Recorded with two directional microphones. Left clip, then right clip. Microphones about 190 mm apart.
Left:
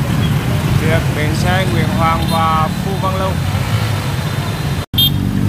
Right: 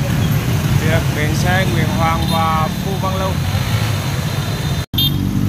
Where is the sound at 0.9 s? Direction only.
Centre (ahead or behind).